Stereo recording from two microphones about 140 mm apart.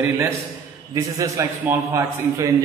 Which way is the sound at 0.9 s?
25° right (ahead or behind).